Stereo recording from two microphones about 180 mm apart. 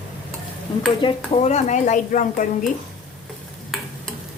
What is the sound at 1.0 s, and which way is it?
Speech, 35° left (ahead or behind).